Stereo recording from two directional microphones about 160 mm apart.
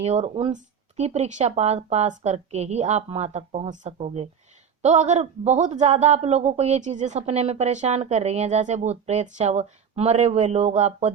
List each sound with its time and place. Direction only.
0.0 s a man's voice: 40° right (ahead or behind)